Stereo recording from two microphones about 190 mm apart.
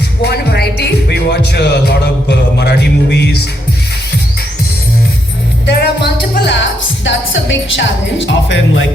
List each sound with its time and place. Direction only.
0.2 s speech: 60° left (ahead or behind)
2.6 s music: 60° left (ahead or behind)
5.6 s a woman's voice: 60° left (ahead or behind)